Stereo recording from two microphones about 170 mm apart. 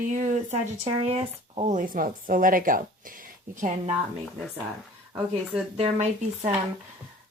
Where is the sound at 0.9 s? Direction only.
35° right (ahead or behind); by 2.8 s 55° right (ahead or behind).